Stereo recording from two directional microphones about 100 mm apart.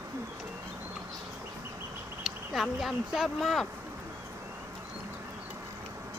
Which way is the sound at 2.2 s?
Centre (ahead or behind).